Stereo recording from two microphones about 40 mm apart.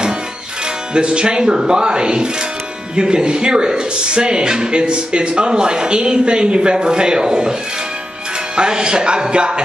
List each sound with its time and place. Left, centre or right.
0.9 s speech: right
8.5 s speech: right